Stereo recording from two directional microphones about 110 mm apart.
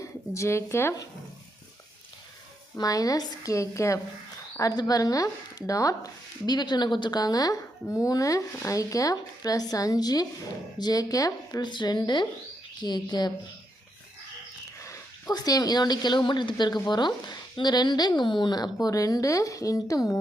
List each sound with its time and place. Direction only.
0.0 s speech: 25° left (ahead or behind)
2.7 s speech: 35° left (ahead or behind)
14.8 s speech: 30° left (ahead or behind)